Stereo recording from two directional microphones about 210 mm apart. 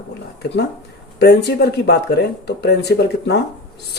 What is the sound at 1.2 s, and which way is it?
Speech, 50° left (ahead or behind).